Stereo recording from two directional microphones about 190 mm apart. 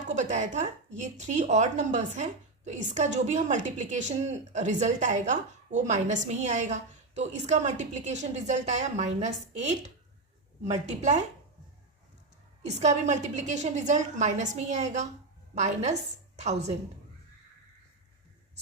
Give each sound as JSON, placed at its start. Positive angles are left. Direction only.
{"t": 0.0, "sound": "speech", "side_deg": -40}
{"t": 12.6, "sound": "speech", "side_deg": -35}